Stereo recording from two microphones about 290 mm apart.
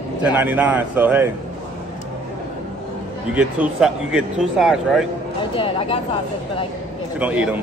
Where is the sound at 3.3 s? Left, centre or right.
Centre.